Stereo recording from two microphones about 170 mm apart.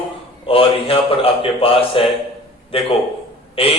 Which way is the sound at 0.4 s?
35° left (ahead or behind).